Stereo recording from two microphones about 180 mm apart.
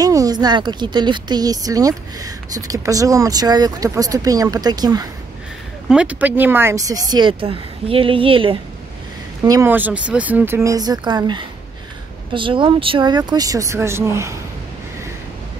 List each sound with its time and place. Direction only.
0.0 s a woman's voice: 20° right (ahead or behind)
5.9 s a woman's voice: 5° right (ahead or behind); by 8.5 s 30° right (ahead or behind)
9.4 s a woman's voice: 15° right (ahead or behind)